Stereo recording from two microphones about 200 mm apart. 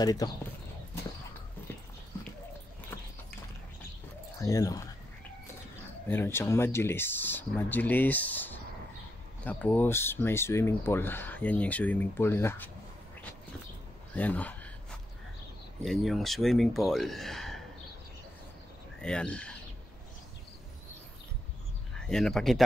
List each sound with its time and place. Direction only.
0.0 s speech: 20° left (ahead or behind)
4.4 s speech: 15° left (ahead or behind)
6.0 s speech: 10° left (ahead or behind)
14.1 s speech: 5° left (ahead or behind)
15.8 s speech: centre (ahead or behind)
18.9 s speech: 5° left (ahead or behind)
21.9 s speech: 5° left (ahead or behind)